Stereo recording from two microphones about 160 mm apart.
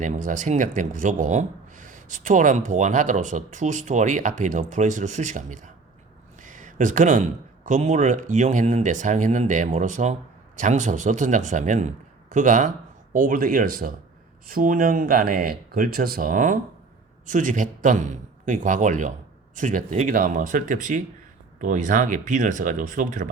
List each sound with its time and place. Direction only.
0.0 s speech: 50° right (ahead or behind)
6.4 s a sound: 50° right (ahead or behind)
7.7 s speech: 45° right (ahead or behind)